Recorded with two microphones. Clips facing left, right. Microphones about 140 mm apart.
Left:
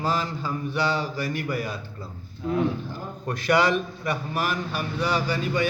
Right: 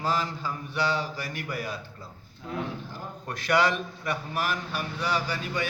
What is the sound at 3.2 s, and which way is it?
A man's voice, 5° left (ahead or behind).